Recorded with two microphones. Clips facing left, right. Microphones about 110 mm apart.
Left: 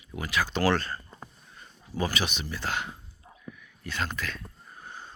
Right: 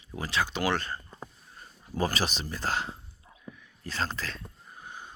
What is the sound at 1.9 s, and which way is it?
Speech, 40° right (ahead or behind).